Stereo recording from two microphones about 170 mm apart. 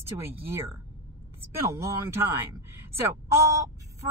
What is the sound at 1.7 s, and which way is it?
A woman's voice, 15° right (ahead or behind).